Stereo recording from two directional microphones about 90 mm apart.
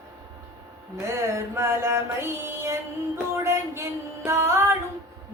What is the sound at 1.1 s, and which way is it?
Music, 35° right (ahead or behind).